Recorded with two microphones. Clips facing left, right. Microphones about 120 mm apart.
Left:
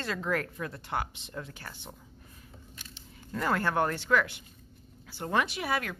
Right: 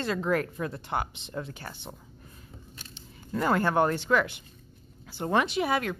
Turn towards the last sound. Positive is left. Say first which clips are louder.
# right 5 dB
turn(degrees=-20)  # may be behind; listen again after turning